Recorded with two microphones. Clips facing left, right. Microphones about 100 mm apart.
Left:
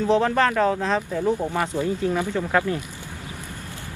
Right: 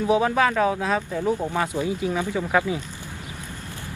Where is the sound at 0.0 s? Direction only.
10° right (ahead or behind).